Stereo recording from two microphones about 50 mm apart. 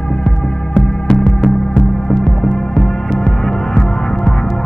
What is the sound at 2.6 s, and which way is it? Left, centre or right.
Music, centre.